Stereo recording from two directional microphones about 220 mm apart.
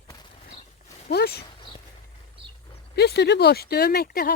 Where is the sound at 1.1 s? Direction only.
45° left (ahead or behind).